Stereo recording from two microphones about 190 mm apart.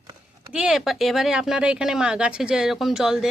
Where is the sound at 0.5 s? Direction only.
5° right (ahead or behind).